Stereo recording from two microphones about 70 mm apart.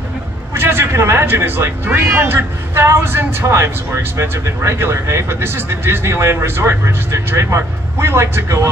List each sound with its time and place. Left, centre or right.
0.6 s speech: right